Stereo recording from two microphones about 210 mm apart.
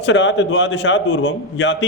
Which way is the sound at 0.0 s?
60° left (ahead or behind).